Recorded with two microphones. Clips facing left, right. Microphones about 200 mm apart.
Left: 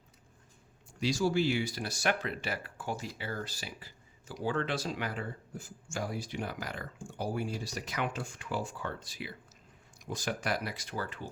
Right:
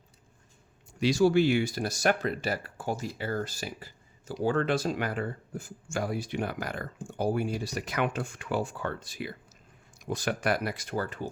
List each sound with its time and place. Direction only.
0.9 s speech: 65° right (ahead or behind); by 9.3 s 50° right (ahead or behind)
10.1 s speech: 60° right (ahead or behind); by 11.3 s 45° right (ahead or behind)